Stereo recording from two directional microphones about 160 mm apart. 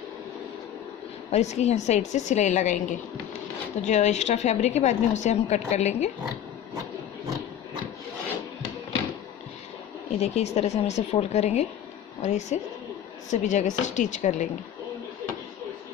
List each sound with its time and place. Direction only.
1.3 s a woman's voice: 45° left (ahead or behind)
10.1 s a woman's voice: 40° left (ahead or behind)